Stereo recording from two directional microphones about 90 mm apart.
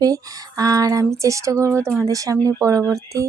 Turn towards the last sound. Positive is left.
turn(degrees=-35)  # may be behind; listen again after turning